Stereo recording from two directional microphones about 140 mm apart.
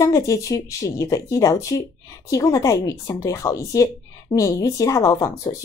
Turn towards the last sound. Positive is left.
turn(degrees=25)  # may be behind; listen again after turning